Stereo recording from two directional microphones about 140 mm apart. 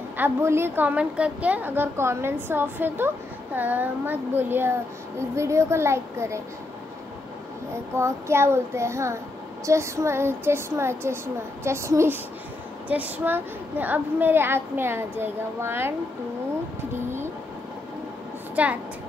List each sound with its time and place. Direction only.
0.2 s a woman's voice: 15° right (ahead or behind)
7.7 s a child's voice: 20° right (ahead or behind)
18.6 s a woman's voice: 10° right (ahead or behind)